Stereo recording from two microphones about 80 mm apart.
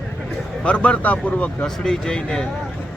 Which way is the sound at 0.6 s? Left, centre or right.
Centre.